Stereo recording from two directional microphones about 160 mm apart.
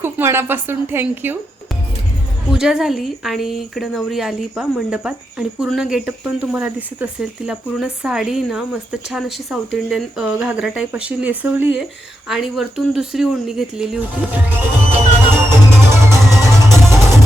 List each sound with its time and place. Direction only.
0.0 s a woman's voice: 15° right (ahead or behind)
2.5 s speech: 5° right (ahead or behind)
16.9 s music: 15° right (ahead or behind)